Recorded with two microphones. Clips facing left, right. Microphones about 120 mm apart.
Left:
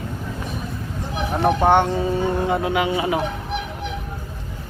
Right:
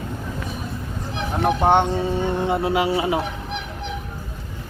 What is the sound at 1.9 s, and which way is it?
Speech, centre (ahead or behind).